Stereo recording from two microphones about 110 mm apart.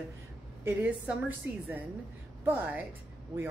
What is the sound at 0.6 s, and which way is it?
A woman's voice, 15° right (ahead or behind).